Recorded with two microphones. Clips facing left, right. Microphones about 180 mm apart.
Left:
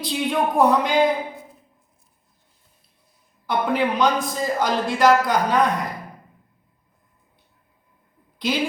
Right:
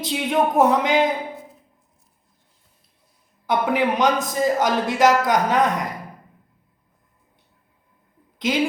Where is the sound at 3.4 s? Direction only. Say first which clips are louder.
Right 1 dB; 20° right (ahead or behind).